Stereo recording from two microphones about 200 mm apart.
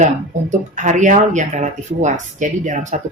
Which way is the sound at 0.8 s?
40° right (ahead or behind).